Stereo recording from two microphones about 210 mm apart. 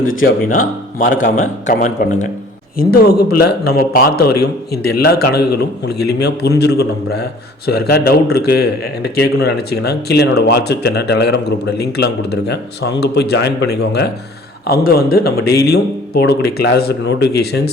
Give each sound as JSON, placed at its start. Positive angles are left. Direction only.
{"t": 0.5, "sound": "speech", "side_deg": 40}
{"t": 2.9, "sound": "speech", "side_deg": 50}